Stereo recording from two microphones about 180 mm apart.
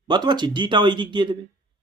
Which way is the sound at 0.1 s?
25° right (ahead or behind).